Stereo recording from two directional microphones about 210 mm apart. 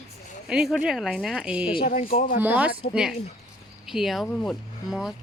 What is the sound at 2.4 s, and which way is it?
Speech, 10° right (ahead or behind).